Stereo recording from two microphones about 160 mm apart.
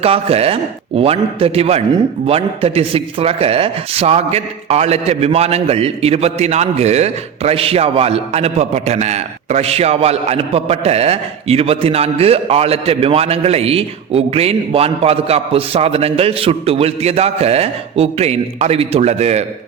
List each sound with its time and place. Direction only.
0.0 s a man's voice: 40° right (ahead or behind)